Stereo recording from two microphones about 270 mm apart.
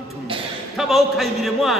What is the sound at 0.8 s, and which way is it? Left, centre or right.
Speech, centre.